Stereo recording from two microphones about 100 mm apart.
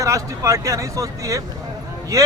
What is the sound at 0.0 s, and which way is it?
Speech, 30° right (ahead or behind).